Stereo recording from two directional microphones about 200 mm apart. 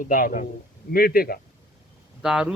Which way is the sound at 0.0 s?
45° left (ahead or behind).